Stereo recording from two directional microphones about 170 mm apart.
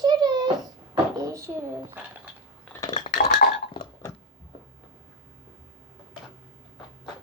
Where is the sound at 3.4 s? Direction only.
65° left (ahead or behind).